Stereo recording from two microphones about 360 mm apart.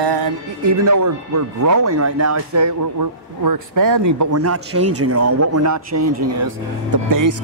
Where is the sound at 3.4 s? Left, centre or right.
Right.